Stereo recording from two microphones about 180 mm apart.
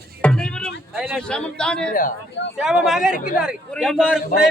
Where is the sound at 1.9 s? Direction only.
50° left (ahead or behind).